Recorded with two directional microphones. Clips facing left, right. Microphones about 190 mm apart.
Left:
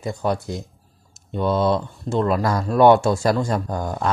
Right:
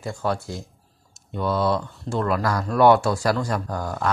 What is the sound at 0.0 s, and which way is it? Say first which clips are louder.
Speech: left 3 dB; 15° left (ahead or behind).